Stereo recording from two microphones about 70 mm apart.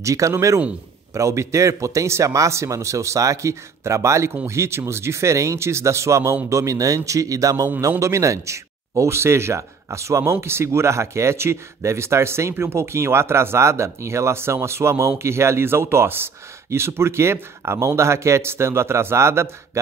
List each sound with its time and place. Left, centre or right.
0.0 s a man's voice: right